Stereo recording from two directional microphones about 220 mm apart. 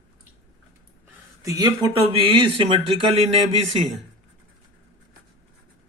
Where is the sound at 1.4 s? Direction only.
15° right (ahead or behind).